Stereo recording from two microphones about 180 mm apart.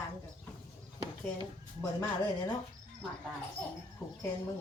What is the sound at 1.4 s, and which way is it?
Speech, 20° left (ahead or behind).